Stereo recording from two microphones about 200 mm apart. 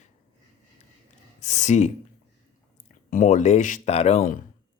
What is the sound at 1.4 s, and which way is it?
Speech, 35° left (ahead or behind).